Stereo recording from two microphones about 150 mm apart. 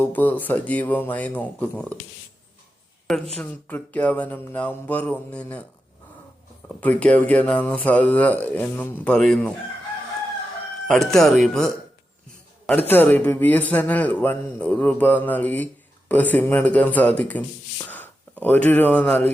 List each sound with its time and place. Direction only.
0.0 s speech: 10° left (ahead or behind)
3.3 s speech: 10° left (ahead or behind)
6.7 s speech: 10° left (ahead or behind)
10.8 s speech: 5° left (ahead or behind)
12.9 s speech: 10° left (ahead or behind)